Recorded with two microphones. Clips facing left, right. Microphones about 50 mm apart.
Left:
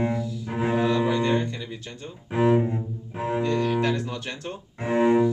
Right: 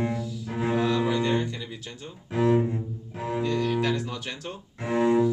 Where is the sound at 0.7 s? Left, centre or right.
Centre.